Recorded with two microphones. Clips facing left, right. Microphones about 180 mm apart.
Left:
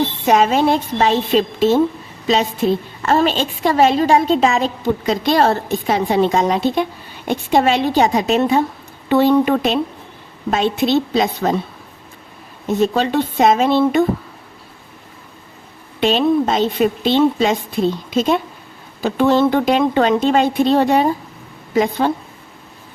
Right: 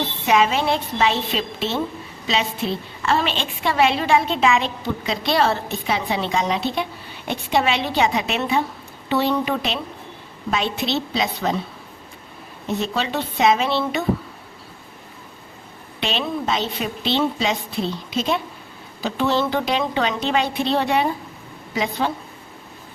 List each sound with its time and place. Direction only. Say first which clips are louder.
0.3 s a woman's voice: left 4 dB; 45° left (ahead or behind)
12.8 s a woman's voice: left 10 dB; 45° left (ahead or behind)
16.0 s a woman's voice: left 10 dB; 45° left (ahead or behind)